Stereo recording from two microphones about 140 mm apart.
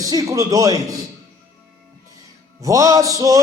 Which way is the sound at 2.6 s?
25° right (ahead or behind).